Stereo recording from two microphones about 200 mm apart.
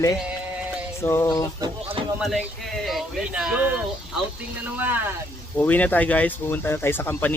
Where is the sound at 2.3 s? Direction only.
Centre (ahead or behind).